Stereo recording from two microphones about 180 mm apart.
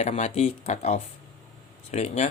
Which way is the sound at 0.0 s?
40° left (ahead or behind).